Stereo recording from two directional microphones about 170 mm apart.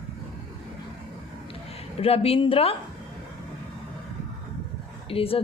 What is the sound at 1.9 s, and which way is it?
Speech, 35° left (ahead or behind).